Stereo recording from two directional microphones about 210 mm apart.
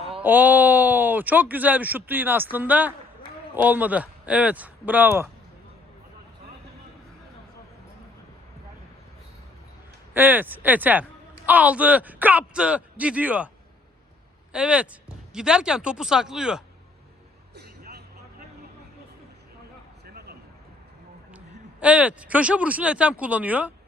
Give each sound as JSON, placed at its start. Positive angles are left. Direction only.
{"t": 0.2, "sound": "speech", "side_deg": -10}
{"t": 10.2, "sound": "speech", "side_deg": -10}
{"t": 14.5, "sound": "speech", "side_deg": -5}
{"t": 17.5, "sound": "vehicle", "side_deg": -50}
{"t": 20.1, "sound": "a sound", "side_deg": -50}
{"t": 21.3, "sound": "speech", "side_deg": -5}